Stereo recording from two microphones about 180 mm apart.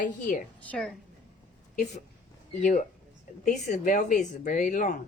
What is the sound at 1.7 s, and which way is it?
A woman's voice, 40° left (ahead or behind).